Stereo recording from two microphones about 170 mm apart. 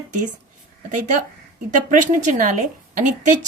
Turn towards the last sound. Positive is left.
turn(degrees=-50)  # may be behind; listen again after turning